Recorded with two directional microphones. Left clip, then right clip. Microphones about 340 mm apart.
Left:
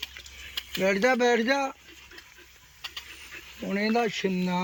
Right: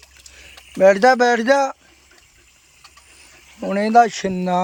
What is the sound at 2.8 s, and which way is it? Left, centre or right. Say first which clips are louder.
Ratchet: left 9 dB; centre.